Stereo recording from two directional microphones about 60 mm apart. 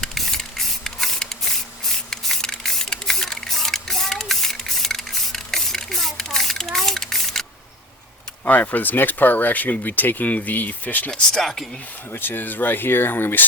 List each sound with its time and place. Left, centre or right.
0.0 s spray: centre
8.4 s speech: left
11.1 s speech: centre
12.1 s speech: left